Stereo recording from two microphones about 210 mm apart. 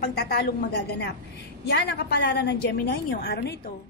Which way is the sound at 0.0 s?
45° left (ahead or behind).